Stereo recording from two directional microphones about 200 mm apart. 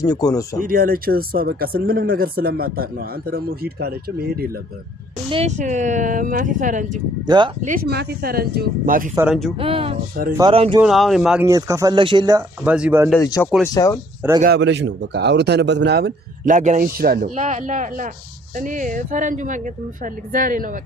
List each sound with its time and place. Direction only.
0.0 s speech: 20° left (ahead or behind)
0.6 s speech: 45° right (ahead or behind)
5.3 s speech: 35° right (ahead or behind)
7.3 s speech: 25° right (ahead or behind)
7.6 s speech: 45° right (ahead or behind)
9.1 s speech: 5° right (ahead or behind)
9.6 s speech: 25° right (ahead or behind)
10.8 s speech: centre (ahead or behind); by 12.4 s 20° right (ahead or behind)
12.6 s speech: 5° right (ahead or behind)
13.1 s speech: 15° left (ahead or behind)
14.4 s speech: 60° right (ahead or behind)
16.5 s speech: 40° right (ahead or behind)